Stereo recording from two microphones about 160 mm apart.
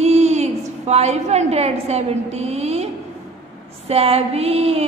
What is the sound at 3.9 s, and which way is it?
Speech, 40° right (ahead or behind).